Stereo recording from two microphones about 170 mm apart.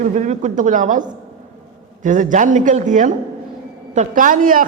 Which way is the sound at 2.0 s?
50° right (ahead or behind).